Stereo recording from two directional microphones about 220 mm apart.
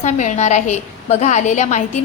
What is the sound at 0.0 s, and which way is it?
A woman's voice, 35° left (ahead or behind).